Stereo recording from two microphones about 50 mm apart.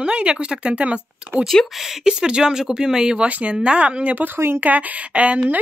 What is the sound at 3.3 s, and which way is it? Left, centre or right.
Speech, right.